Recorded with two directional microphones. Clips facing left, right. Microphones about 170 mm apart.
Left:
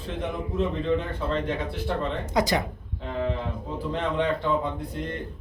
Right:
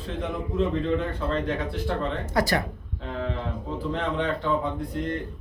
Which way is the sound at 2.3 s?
20° left (ahead or behind).